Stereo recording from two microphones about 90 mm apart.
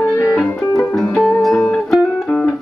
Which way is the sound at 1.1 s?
15° left (ahead or behind).